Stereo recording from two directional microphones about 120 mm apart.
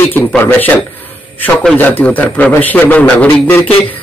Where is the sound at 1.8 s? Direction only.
15° left (ahead or behind).